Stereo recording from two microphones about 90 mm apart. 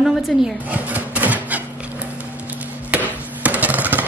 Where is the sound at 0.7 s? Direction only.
15° right (ahead or behind).